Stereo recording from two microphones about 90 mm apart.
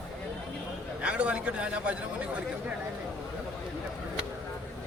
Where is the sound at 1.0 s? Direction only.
15° right (ahead or behind).